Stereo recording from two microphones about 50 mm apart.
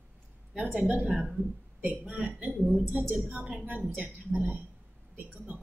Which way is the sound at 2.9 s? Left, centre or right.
Right.